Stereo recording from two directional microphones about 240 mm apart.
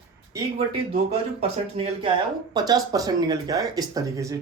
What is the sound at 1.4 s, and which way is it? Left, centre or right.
Speech, right.